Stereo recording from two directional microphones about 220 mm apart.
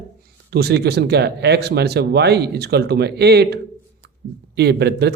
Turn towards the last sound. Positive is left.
turn(degrees=-50)  # may be behind; listen again after turning